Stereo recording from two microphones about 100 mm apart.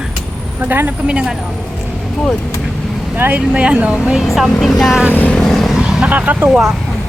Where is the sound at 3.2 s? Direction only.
20° right (ahead or behind); by 5.0 s centre (ahead or behind).